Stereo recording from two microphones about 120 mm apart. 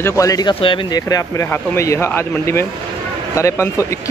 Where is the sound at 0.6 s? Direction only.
45° left (ahead or behind).